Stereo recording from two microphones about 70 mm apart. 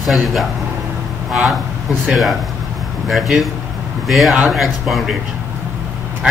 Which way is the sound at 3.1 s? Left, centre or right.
Centre.